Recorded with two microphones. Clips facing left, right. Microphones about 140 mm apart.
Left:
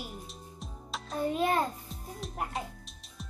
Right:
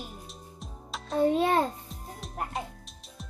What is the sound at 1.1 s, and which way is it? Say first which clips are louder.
Music: right 5 dB; 30° right (ahead or behind).